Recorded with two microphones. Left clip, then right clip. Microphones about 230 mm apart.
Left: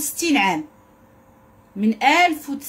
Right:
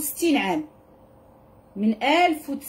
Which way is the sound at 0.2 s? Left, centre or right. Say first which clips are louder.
Left 4 dB; left.